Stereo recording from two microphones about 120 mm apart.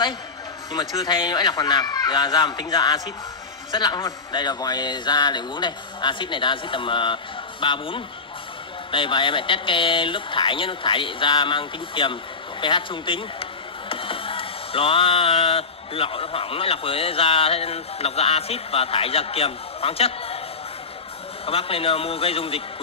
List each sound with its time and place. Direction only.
0.7 s a man's voice: 35° left (ahead or behind); by 20.3 s 55° left (ahead or behind)
21.5 s speech: 55° left (ahead or behind)